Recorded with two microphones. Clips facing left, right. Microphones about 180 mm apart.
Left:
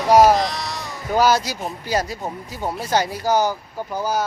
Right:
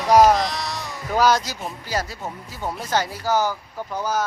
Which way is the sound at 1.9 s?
15° left (ahead or behind).